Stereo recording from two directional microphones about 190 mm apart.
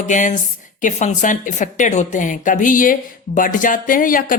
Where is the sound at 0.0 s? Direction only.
40° left (ahead or behind).